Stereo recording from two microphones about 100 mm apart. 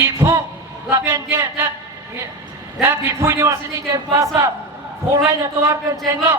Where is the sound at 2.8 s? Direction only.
25° right (ahead or behind).